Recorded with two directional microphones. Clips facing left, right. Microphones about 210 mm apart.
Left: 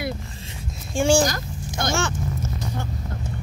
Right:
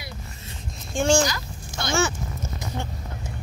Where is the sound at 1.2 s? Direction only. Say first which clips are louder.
Left 3 dB; 45° left (ahead or behind).